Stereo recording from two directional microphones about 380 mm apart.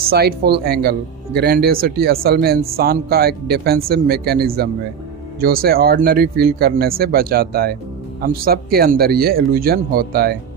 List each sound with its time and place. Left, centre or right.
0.0 s speech: right